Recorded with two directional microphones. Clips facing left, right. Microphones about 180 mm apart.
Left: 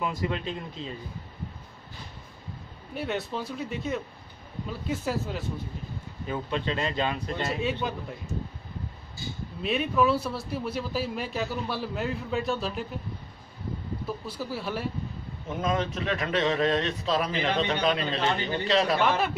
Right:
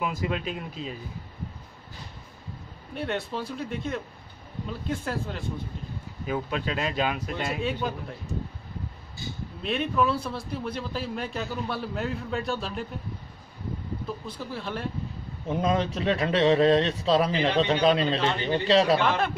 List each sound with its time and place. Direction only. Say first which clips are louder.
0.0 s speech: right 1 dB; 10° right (ahead or behind)
2.9 s a man's voice: even; 5° left (ahead or behind)
6.2 s speech: right 1 dB; 10° right (ahead or behind)
9.6 s a man's voice: left 1 dB; 5° left (ahead or behind)
14.2 s speech: left 2 dB; 5° left (ahead or behind)
15.4 s speech: right 3 dB; 35° right (ahead or behind)
19.0 s a man's voice: even; 5° left (ahead or behind)